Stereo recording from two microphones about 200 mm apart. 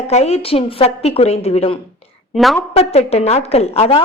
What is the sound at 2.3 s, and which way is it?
Speech, centre (ahead or behind).